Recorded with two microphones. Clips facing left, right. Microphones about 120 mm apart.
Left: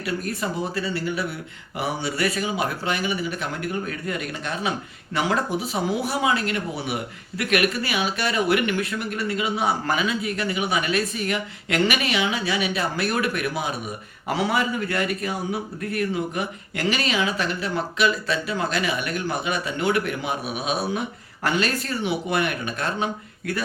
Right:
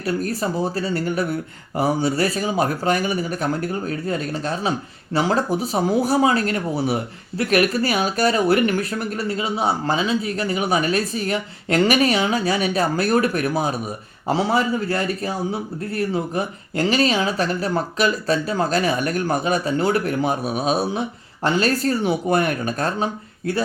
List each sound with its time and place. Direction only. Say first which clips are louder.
0.0 s speech: right 4 dB; 40° right (ahead or behind)